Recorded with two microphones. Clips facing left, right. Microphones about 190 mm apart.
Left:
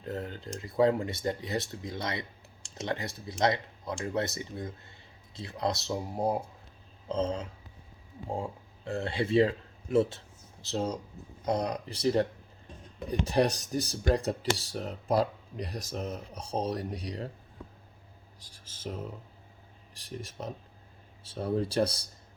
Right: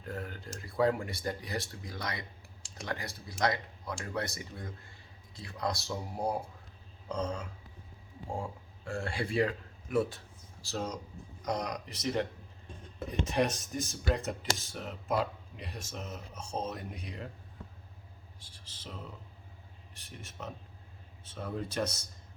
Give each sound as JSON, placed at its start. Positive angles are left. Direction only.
{"t": 0.0, "sound": "speech", "side_deg": 20}
{"t": 18.3, "sound": "speech", "side_deg": 40}
{"t": 19.9, "sound": "speech", "side_deg": 35}